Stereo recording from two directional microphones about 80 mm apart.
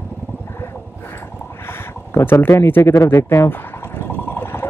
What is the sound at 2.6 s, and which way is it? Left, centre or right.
Speech, left.